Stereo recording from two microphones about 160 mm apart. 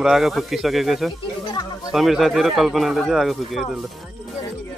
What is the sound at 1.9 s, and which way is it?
Speech, centre (ahead or behind).